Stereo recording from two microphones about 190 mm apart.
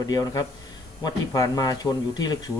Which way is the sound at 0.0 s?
20° left (ahead or behind).